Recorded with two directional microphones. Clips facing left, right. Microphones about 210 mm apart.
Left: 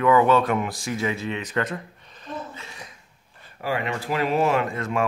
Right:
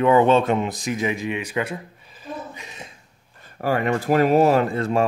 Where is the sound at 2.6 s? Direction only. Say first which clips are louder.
Right 2 dB; 20° right (ahead or behind).